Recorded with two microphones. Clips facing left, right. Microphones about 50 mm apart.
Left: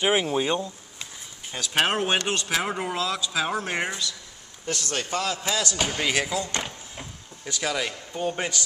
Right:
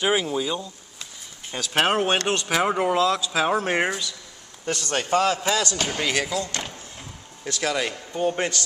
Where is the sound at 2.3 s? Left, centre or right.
Centre.